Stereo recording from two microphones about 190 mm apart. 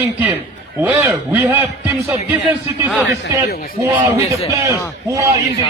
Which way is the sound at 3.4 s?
55° left (ahead or behind).